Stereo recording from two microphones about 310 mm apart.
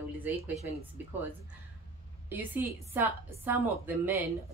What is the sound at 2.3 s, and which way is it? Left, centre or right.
A woman's voice, centre.